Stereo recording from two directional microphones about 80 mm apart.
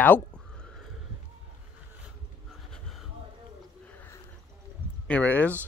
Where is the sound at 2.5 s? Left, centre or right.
Centre.